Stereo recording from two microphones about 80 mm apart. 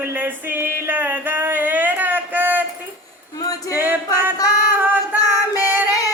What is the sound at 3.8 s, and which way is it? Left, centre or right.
Music, right.